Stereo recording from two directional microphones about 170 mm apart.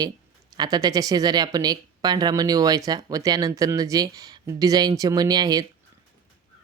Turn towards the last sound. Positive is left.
turn(degrees=-25)  # may be behind; listen again after turning